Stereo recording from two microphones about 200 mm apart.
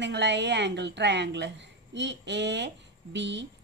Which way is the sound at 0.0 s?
60° right (ahead or behind).